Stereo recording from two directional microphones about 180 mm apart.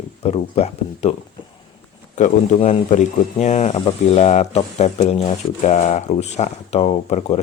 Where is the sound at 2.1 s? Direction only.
40° left (ahead or behind).